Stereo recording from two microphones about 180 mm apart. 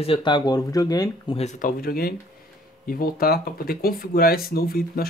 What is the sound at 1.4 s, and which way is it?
Speech, 45° left (ahead or behind).